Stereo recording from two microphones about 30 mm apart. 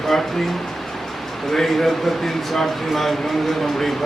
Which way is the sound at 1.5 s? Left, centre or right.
Centre.